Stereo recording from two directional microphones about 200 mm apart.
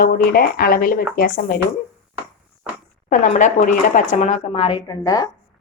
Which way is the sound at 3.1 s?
40° left (ahead or behind).